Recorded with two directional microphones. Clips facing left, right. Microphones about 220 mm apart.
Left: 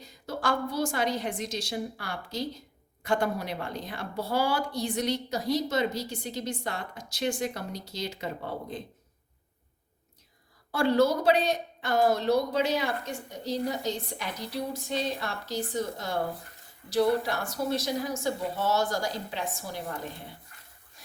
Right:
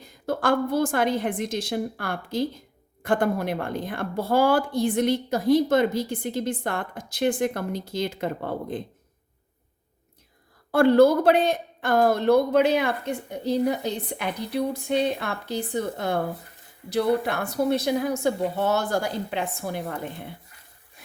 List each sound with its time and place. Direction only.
0.0 s a woman's voice: 55° right (ahead or behind)
10.7 s speech: 55° right (ahead or behind)